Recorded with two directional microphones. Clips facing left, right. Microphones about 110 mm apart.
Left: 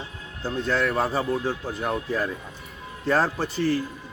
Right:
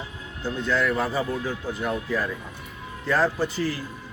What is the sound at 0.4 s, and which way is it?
A man's voice, 40° left (ahead or behind).